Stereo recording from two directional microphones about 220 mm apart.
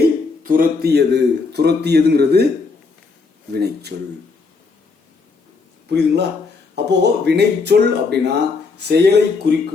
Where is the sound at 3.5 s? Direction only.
50° right (ahead or behind).